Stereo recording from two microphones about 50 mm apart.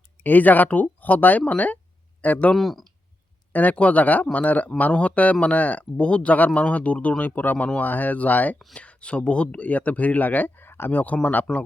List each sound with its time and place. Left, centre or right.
0.2 s speech: left
2.6 s speech: centre
3.5 s speech: left
8.7 s speech: left
11.0 s speech: left